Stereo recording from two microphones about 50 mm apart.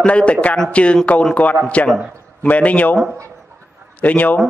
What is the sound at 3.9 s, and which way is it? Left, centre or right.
Speech, left.